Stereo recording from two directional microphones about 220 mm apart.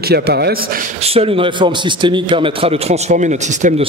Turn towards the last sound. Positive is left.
turn(degrees=-35)  # may be behind; listen again after turning